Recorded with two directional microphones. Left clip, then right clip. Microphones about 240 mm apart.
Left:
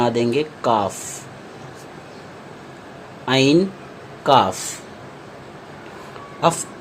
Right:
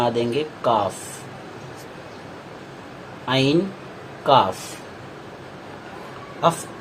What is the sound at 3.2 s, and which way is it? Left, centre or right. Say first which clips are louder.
A man's voice: left 4 dB; left.